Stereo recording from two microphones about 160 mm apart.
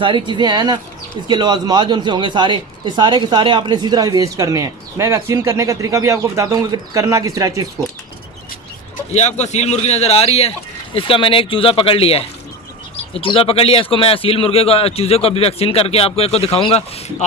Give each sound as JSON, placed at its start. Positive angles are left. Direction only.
{"t": 0.0, "sound": "speech", "side_deg": -30}
{"t": 9.1, "sound": "a man's voice", "side_deg": 45}